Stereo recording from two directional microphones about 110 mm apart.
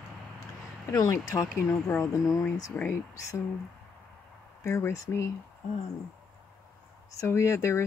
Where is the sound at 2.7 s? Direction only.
20° left (ahead or behind).